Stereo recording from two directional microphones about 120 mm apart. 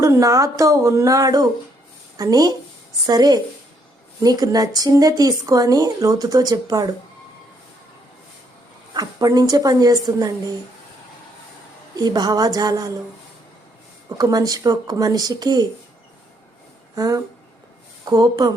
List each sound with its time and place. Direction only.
0.0 s speech: 25° right (ahead or behind)
8.9 s speech: 35° right (ahead or behind)
11.9 s speech: 35° right (ahead or behind)
14.2 s speech: 35° right (ahead or behind)
16.9 s speech: 30° right (ahead or behind)